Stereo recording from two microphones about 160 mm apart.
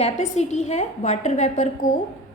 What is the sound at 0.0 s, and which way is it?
A woman's voice, 45° left (ahead or behind).